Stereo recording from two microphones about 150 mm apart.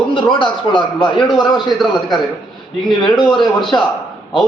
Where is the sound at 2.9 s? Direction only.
30° left (ahead or behind).